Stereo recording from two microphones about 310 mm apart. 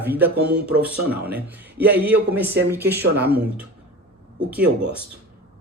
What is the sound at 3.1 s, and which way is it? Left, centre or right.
Speech, right.